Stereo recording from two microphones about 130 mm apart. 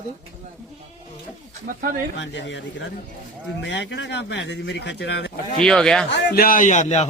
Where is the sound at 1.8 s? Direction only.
90° right.